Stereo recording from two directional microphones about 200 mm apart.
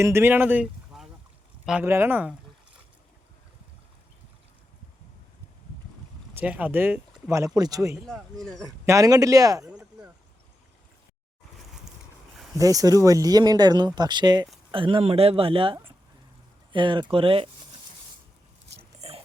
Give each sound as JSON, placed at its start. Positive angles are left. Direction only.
{"t": 0.0, "sound": "speech", "side_deg": -10}
{"t": 6.3, "sound": "speech", "side_deg": -5}
{"t": 8.0, "sound": "speech", "side_deg": 5}
{"t": 8.9, "sound": "speech", "side_deg": -15}
{"t": 12.5, "sound": "speech", "side_deg": -15}
{"t": 18.9, "sound": "dog", "side_deg": -30}